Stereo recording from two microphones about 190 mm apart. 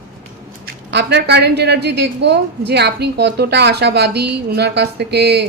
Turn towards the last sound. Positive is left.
turn(degrees=-60)  # may be behind; listen again after turning